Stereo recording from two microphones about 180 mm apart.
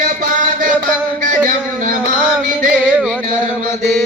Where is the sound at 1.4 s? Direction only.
50° right (ahead or behind).